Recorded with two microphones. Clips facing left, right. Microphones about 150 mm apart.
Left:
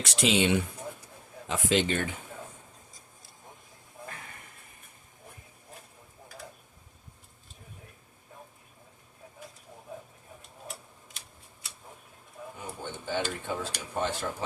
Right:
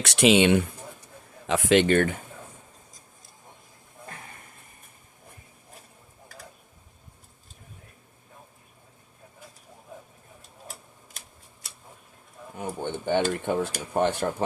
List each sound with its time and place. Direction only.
0.0 s speech: 70° right (ahead or behind)
12.5 s pigeon: 65° right (ahead or behind)
13.5 s speech: 60° right (ahead or behind)